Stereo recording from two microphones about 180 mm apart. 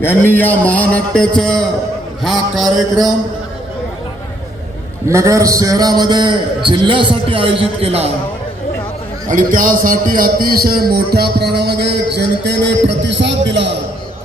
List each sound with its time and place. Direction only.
0.0 s a man's voice: 10° left (ahead or behind)
5.0 s a man's voice: 15° right (ahead or behind); by 8.1 s 35° right (ahead or behind)
9.2 s a man's voice: 45° right (ahead or behind); by 13.7 s 75° right (ahead or behind)